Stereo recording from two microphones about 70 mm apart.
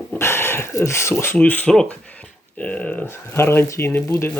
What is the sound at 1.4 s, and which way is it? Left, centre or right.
Speech, left.